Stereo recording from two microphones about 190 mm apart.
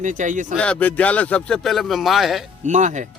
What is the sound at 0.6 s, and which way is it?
Speech, 5° left (ahead or behind).